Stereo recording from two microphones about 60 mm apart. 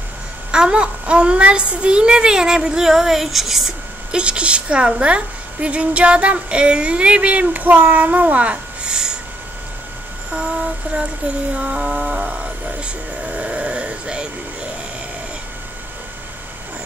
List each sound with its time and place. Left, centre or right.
0.5 s a child's voice: centre
4.2 s a woman's voice: centre
11.5 s a child's voice: centre
12.8 s a sound: right